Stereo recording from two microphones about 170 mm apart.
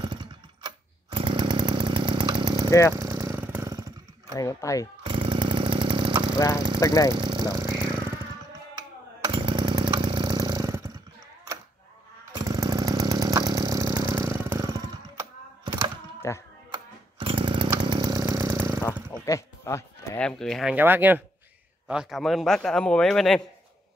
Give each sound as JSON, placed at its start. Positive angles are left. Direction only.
{"t": 0.0, "sound": "chainsaw", "side_deg": -25}
{"t": 4.4, "sound": "speech", "side_deg": 20}
{"t": 5.0, "sound": "chainsaw", "side_deg": -30}
{"t": 6.8, "sound": "speech", "side_deg": 20}
{"t": 7.2, "sound": "a sound", "side_deg": -25}
{"t": 9.2, "sound": "chainsaw", "side_deg": -25}
{"t": 12.4, "sound": "chainsaw", "side_deg": -20}
{"t": 16.2, "sound": "typing", "side_deg": 15}
{"t": 16.7, "sound": "chainsaw", "side_deg": -30}
{"t": 18.9, "sound": "a sound", "side_deg": -10}
{"t": 19.2, "sound": "music", "side_deg": 20}
{"t": 20.2, "sound": "a sound", "side_deg": 5}
{"t": 20.7, "sound": "a man's voice", "side_deg": -10}